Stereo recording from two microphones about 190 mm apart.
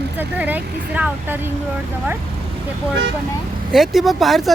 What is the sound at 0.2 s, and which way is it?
Speech, 10° right (ahead or behind).